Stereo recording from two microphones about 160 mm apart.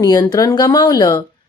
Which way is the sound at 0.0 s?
20° left (ahead or behind).